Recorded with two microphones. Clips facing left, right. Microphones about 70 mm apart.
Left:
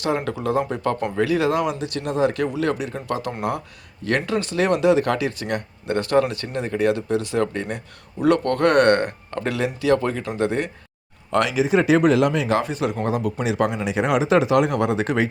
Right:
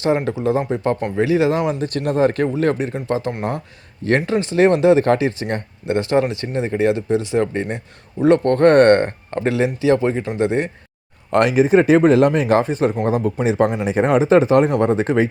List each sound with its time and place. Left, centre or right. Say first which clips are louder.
0.3 s speech: right 3 dB; right
1.8 s speech: right 4 dB; right
2.9 s speech: right 4 dB; right
11.3 s speech: right 5 dB; right